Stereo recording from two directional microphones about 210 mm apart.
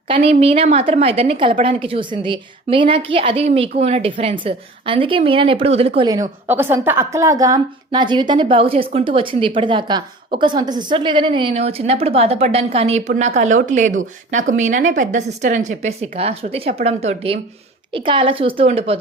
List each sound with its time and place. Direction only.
0.1 s a woman's voice: 30° right (ahead or behind)